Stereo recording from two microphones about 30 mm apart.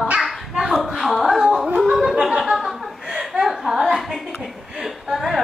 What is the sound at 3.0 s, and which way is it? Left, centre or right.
Chuckle, centre.